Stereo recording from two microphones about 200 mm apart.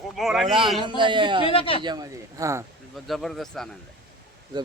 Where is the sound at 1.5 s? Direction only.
25° left (ahead or behind).